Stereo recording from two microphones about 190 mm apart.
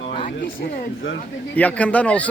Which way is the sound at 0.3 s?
45° left (ahead or behind).